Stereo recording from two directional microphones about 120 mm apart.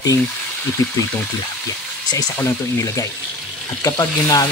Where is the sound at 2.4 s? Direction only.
25° left (ahead or behind).